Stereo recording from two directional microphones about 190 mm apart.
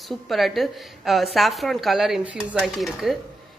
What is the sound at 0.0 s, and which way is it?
A woman's voice, centre (ahead or behind).